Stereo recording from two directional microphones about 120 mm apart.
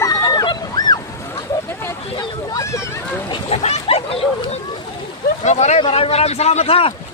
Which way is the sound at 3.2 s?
50° left (ahead or behind).